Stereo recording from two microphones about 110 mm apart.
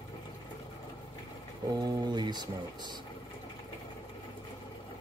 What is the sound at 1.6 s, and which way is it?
Speech, 35° right (ahead or behind).